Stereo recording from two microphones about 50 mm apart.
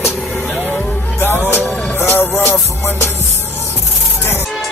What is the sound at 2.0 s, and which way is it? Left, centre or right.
Music, left.